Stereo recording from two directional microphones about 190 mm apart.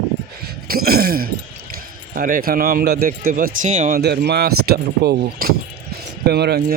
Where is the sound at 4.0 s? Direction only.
60° right (ahead or behind).